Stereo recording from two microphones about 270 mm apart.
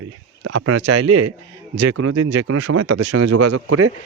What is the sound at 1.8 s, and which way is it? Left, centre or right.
Speech, right.